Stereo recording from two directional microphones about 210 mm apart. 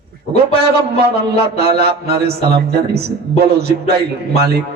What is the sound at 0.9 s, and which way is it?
Speech, 50° right (ahead or behind).